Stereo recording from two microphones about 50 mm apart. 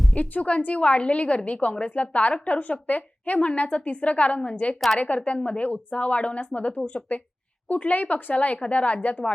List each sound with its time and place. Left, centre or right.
0.2 s a woman's voice: left